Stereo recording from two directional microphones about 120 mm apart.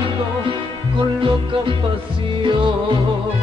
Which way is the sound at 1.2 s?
45° right (ahead or behind).